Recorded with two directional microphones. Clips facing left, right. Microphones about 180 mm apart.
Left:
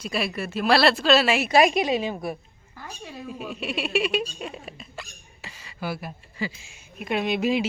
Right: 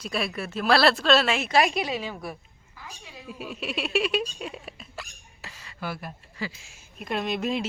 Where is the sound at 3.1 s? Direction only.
45° left (ahead or behind).